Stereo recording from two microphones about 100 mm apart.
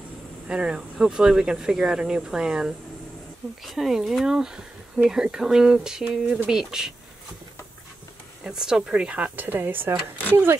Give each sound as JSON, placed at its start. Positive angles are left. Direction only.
{"t": 0.5, "sound": "speech", "side_deg": -10}
{"t": 8.5, "sound": "speech", "side_deg": -5}